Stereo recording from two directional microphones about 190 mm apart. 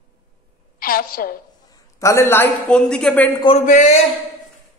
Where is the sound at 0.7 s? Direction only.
50° left (ahead or behind).